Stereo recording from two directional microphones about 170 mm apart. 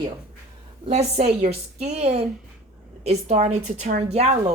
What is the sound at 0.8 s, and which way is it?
A woman's voice, 40° right (ahead or behind).